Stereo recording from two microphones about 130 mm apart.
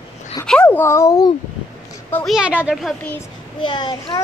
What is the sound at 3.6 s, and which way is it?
Speech, 35° left (ahead or behind).